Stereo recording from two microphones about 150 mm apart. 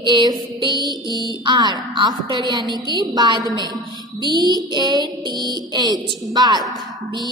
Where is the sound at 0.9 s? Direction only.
30° right (ahead or behind).